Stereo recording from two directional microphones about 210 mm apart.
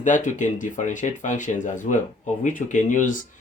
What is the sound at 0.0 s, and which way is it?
Speech, 35° left (ahead or behind).